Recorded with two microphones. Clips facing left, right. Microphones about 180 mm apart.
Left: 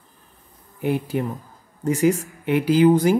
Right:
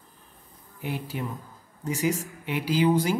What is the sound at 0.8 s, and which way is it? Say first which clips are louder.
Speech: left 9 dB; 55° left (ahead or behind).